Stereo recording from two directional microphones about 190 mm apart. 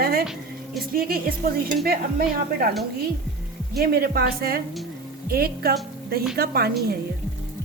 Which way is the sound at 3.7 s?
55° right (ahead or behind).